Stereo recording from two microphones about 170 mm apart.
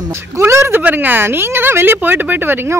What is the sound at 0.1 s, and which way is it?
Speech, 15° right (ahead or behind).